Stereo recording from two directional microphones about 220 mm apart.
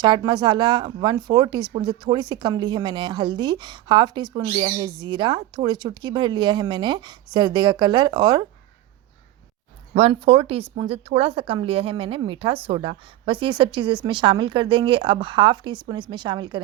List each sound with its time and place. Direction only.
0.0 s speech: 20° right (ahead or behind)
9.9 s speech: 25° right (ahead or behind)